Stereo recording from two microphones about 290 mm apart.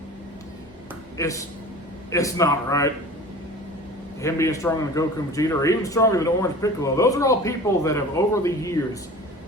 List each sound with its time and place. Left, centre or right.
1.1 s a man's voice: centre
4.2 s a man's voice: centre